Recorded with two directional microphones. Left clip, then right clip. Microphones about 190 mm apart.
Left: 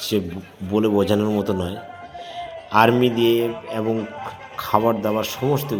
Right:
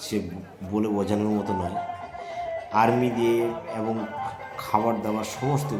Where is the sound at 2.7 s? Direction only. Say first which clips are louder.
Left 6 dB; 25° left (ahead or behind).